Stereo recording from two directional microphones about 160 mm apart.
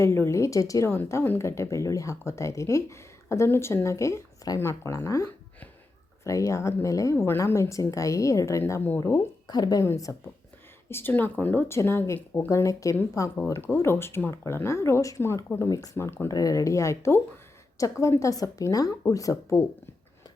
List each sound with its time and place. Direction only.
0.0 s a woman's voice: 15° left (ahead or behind)